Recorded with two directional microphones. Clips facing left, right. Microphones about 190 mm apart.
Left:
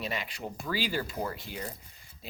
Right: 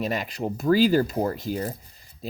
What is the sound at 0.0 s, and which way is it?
Speech, 45° right (ahead or behind).